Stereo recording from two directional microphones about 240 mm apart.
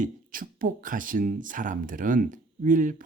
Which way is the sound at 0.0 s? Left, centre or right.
Right.